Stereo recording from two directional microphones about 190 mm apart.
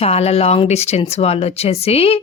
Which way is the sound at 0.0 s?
35° left (ahead or behind).